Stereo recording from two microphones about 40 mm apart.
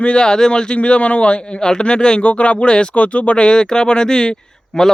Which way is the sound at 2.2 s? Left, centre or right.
Left.